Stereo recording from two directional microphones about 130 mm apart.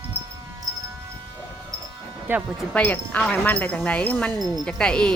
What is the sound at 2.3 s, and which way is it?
Speech, 15° right (ahead or behind).